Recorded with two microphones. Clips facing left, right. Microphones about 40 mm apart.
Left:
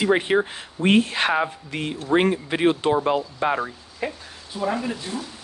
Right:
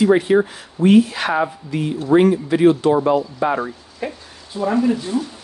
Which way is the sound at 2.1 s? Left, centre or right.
Left.